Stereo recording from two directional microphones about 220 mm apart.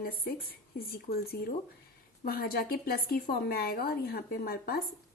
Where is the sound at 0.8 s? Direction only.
45° left (ahead or behind).